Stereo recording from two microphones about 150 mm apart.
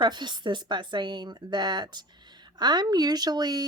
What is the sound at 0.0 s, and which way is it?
Speech, 30° right (ahead or behind).